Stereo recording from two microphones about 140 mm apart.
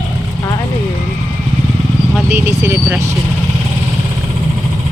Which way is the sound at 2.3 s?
20° right (ahead or behind).